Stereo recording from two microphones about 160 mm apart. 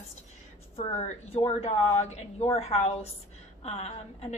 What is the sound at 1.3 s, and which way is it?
A woman's voice, 40° left (ahead or behind).